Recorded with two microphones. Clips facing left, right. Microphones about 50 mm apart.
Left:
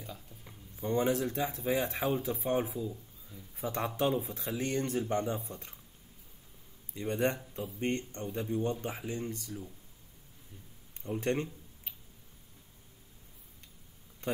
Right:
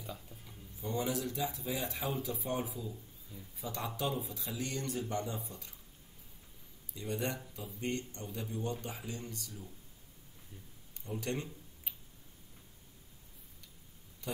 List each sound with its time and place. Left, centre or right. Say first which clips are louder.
0.0 s a sound: even; centre
0.8 s speech: left 6 dB; left
6.9 s speech: left 6 dB; left
11.0 s speech: left 6 dB; left
14.2 s speech: left 6 dB; left